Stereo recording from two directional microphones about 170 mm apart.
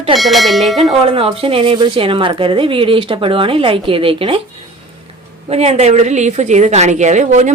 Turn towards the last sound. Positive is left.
turn(degrees=-45)  # may be behind; listen again after turning